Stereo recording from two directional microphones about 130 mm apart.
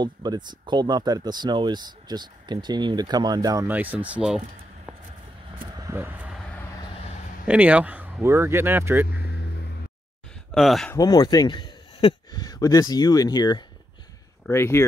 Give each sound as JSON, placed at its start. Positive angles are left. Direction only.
{"t": 0.0, "sound": "speech", "side_deg": -35}
{"t": 3.6, "sound": "speech", "side_deg": -15}
{"t": 5.9, "sound": "speech", "side_deg": -15}
{"t": 7.4, "sound": "speech", "side_deg": -10}
{"t": 10.5, "sound": "speech", "side_deg": 0}
{"t": 11.0, "sound": "a man's voice", "side_deg": 30}
{"t": 14.5, "sound": "speech", "side_deg": 20}